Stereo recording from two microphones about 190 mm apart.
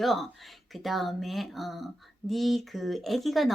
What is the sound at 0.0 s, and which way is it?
Speech, centre (ahead or behind).